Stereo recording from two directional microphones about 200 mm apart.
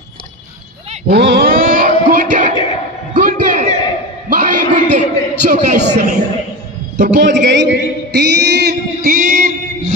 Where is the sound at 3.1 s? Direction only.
40° right (ahead or behind).